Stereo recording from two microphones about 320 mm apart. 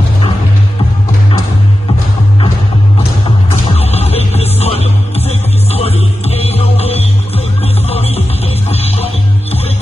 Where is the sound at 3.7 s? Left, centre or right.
Centre.